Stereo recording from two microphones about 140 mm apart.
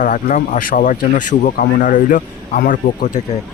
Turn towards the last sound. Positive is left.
turn(degrees=70)  # may be behind; listen again after turning